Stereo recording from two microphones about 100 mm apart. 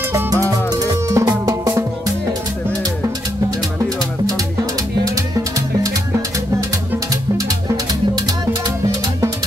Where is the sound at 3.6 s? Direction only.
35° right (ahead or behind).